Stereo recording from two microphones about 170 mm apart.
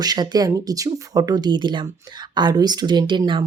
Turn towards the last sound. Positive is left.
turn(degrees=-30)  # may be behind; listen again after turning